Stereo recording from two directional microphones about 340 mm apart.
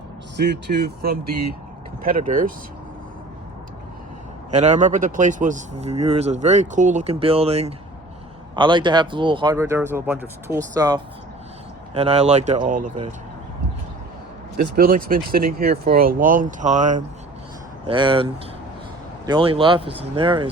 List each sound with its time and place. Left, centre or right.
0.3 s speech: right
4.5 s speech: centre
14.5 s speech: right